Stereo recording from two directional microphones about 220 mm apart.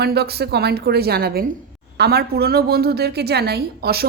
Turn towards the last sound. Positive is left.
turn(degrees=-45)  # may be behind; listen again after turning